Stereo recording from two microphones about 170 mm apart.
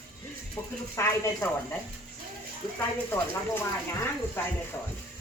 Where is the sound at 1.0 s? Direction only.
15° left (ahead or behind).